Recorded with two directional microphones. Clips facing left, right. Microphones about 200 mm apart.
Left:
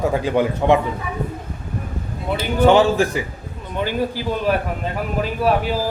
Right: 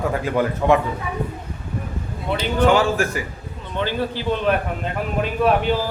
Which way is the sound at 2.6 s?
25° left (ahead or behind).